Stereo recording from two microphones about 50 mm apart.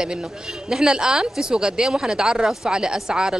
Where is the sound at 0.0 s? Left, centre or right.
Centre.